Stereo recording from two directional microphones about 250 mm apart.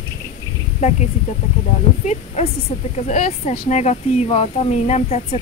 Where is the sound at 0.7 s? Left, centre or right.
Left.